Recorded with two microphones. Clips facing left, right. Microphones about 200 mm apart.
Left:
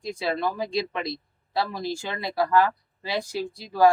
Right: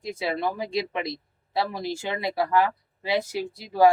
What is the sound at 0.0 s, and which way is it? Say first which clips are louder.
Speech: even; 20° right (ahead or behind).